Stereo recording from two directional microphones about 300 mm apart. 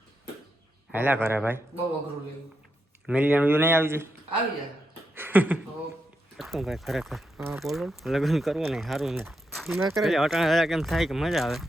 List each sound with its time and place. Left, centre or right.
0.9 s speech: centre
3.1 s speech: centre
5.1 s a sound: centre
6.3 s speech: centre